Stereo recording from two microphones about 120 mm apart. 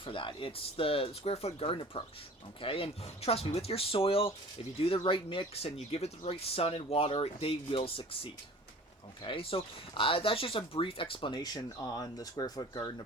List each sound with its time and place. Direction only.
0.0 s speech: 45° left (ahead or behind)